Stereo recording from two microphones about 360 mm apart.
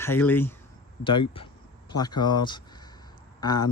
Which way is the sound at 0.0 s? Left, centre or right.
Centre.